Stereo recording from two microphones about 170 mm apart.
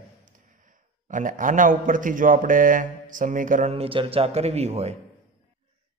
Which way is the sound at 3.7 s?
35° right (ahead or behind).